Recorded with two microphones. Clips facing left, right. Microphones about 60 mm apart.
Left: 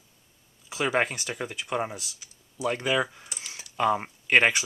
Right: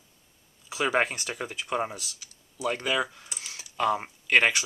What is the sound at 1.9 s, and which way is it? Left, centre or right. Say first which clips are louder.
Speech: even; centre.